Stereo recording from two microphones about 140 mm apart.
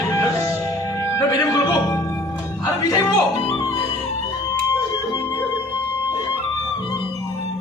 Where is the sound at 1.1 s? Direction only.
20° left (ahead or behind).